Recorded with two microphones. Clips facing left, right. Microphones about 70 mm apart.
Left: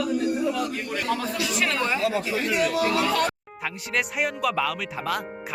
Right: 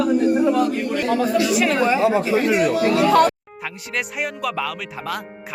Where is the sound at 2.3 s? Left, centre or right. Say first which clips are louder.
Right 6 dB; right.